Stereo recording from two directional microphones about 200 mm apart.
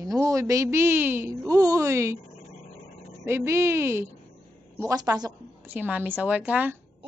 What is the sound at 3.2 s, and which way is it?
A woman's voice, 15° right (ahead or behind).